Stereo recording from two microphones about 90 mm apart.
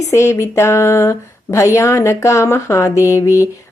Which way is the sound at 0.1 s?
30° left (ahead or behind).